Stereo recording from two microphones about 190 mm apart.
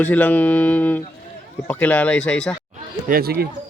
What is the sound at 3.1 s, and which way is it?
Speech, 55° right (ahead or behind).